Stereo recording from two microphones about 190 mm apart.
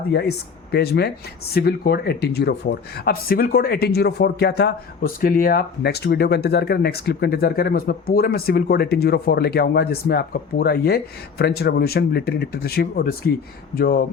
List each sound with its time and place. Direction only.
0.1 s speech: 60° left (ahead or behind)